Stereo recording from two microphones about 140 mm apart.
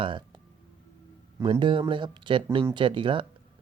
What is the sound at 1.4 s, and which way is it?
Speech, 35° right (ahead or behind).